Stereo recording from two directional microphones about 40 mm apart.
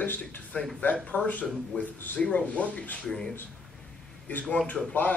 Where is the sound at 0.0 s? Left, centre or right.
Left.